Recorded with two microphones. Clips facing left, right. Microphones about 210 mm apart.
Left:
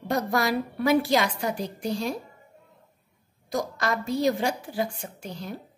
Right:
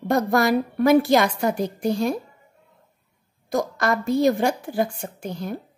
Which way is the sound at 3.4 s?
55° right (ahead or behind).